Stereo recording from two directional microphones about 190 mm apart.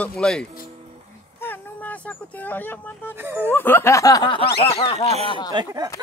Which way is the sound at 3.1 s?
10° right (ahead or behind).